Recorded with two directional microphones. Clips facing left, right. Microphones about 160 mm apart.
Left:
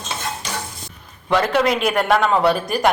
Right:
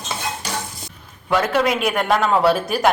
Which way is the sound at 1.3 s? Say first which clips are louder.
Left 1 dB; 5° right (ahead or behind).